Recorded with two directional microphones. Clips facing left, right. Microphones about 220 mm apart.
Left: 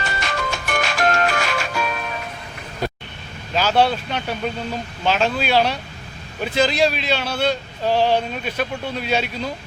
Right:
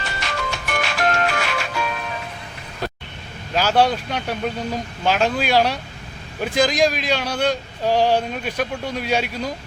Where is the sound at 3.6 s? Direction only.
10° right (ahead or behind).